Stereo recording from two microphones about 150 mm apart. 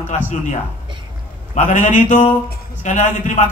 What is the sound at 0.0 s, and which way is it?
A man's voice, 50° left (ahead or behind).